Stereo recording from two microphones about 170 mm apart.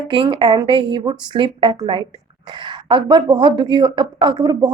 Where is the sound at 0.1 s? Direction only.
30° right (ahead or behind).